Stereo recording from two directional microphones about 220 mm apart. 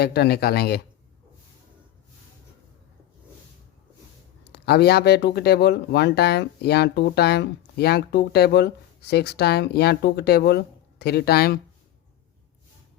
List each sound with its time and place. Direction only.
0.0 s speech: 45° left (ahead or behind)
4.5 s speech: 45° left (ahead or behind)